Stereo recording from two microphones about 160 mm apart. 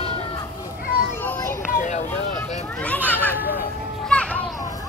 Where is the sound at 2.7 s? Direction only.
10° left (ahead or behind).